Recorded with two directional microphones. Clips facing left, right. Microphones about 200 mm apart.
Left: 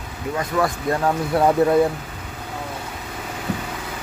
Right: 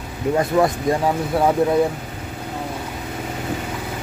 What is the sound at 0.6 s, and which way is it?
Speech, 30° right (ahead or behind).